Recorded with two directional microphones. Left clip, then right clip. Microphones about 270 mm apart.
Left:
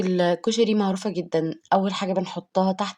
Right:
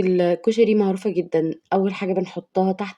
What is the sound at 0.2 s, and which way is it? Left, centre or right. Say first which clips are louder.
Speech: right 3 dB; left.